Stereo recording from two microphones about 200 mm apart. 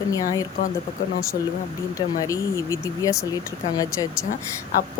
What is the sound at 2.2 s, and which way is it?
Speech, 15° left (ahead or behind).